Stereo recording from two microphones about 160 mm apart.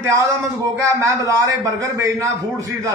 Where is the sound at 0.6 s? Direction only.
20° right (ahead or behind).